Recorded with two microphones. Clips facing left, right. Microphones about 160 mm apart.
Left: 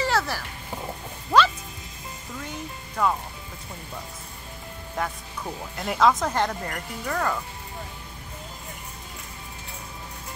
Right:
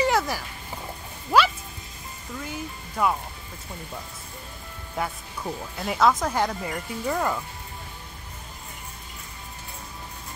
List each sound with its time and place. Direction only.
0.0 s a sound: 15° right (ahead or behind)
3.0 s speech: 5° right (ahead or behind)
5.0 s speech: 5° right (ahead or behind)